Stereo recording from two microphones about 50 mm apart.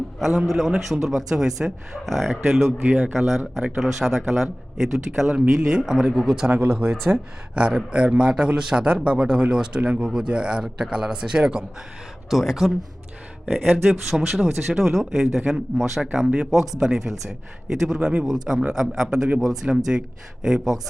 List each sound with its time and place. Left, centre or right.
0.2 s speech: centre
6.5 s speech: right
7.1 s speech: right
7.9 s a man's voice: centre
12.3 s speech: centre